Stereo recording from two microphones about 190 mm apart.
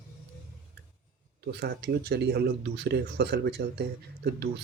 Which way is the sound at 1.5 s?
60° right (ahead or behind).